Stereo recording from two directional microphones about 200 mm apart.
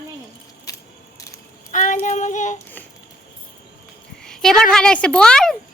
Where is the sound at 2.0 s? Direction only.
35° left (ahead or behind).